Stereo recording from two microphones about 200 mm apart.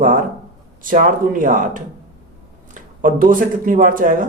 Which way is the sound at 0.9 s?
45° right (ahead or behind).